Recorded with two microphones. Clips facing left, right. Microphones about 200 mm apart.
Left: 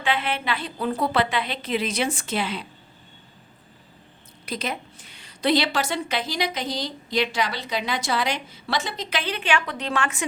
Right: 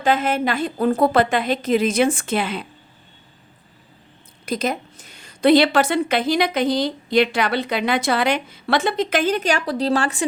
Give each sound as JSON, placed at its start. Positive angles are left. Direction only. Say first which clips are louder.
{"t": 0.0, "sound": "a woman's voice", "louder": "right 7 dB", "side_deg": -45}
{"t": 4.4, "sound": "a woman's voice", "louder": "right 7 dB", "side_deg": -45}